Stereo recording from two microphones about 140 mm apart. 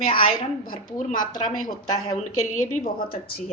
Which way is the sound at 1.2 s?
70° left (ahead or behind).